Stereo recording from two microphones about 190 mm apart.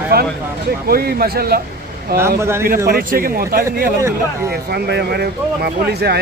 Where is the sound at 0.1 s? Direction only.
55° right (ahead or behind).